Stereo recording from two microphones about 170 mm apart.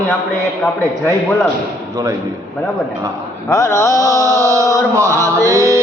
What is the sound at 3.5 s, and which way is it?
Mantra, 15° left (ahead or behind).